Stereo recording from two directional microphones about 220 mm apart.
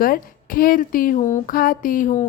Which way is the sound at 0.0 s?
40° left (ahead or behind).